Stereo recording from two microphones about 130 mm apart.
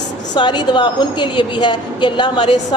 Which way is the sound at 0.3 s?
35° left (ahead or behind).